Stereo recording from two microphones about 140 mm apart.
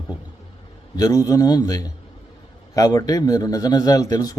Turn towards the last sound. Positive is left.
turn(degrees=25)  # may be behind; listen again after turning